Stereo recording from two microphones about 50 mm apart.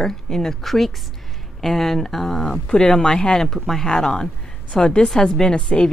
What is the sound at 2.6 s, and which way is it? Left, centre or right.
Speech, centre.